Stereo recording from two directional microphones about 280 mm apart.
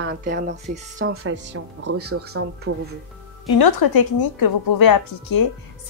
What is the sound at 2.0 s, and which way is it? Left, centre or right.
Speech, right.